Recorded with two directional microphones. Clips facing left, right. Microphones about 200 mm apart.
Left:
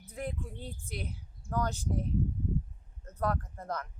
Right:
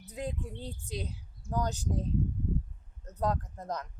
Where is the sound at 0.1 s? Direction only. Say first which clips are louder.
Right 1 dB; 15° right (ahead or behind).